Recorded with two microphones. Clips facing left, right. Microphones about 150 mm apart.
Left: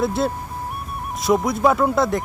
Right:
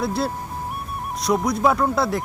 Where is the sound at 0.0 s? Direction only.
Centre (ahead or behind).